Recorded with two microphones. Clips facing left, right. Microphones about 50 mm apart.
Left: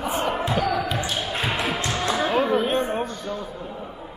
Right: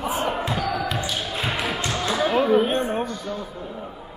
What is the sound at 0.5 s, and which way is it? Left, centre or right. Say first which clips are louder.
Speech: left 2 dB; left.